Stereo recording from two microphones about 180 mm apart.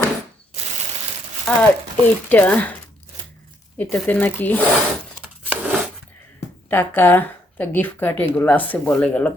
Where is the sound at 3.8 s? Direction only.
10° left (ahead or behind).